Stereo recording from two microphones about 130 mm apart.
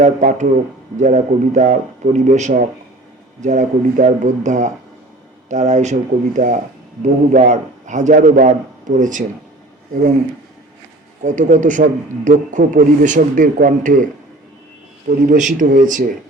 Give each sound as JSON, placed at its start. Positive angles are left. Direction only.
{"t": 0.0, "sound": "a man's voice", "side_deg": -80}
{"t": 0.9, "sound": "a man's voice", "side_deg": -65}
{"t": 11.2, "sound": "a man's voice", "side_deg": -75}